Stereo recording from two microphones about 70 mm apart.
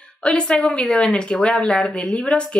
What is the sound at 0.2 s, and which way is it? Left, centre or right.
Speech, centre.